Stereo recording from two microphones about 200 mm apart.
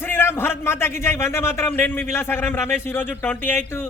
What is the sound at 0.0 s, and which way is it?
A man's voice, 10° left (ahead or behind).